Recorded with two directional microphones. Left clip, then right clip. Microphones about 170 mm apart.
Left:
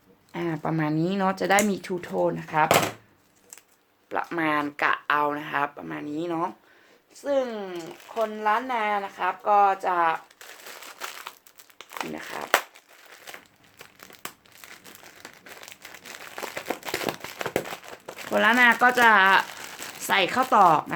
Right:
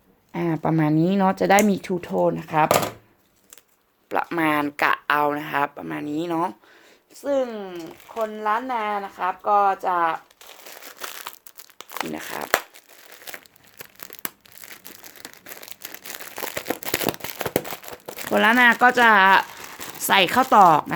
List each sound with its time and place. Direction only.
0.3 s speech: 45° right (ahead or behind)
4.1 s speech: 55° right (ahead or behind)
11.2 s crumpling: 50° right (ahead or behind)
20.0 s speech: 45° right (ahead or behind)